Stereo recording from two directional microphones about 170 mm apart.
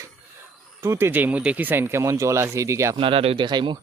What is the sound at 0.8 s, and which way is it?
Speech, 15° right (ahead or behind).